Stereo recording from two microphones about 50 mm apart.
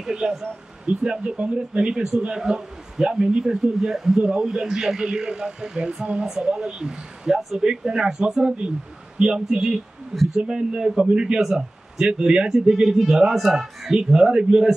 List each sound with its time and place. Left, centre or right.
0.0 s a man's voice: centre
10.1 s speech: centre
10.5 s a man's voice: centre